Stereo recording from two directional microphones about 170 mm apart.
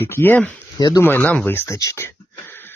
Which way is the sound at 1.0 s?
10° left (ahead or behind).